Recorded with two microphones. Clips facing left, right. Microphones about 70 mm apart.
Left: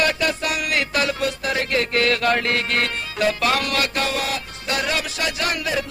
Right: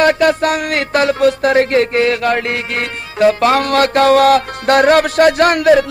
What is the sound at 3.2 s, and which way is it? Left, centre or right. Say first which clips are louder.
Music: right 9 dB; right.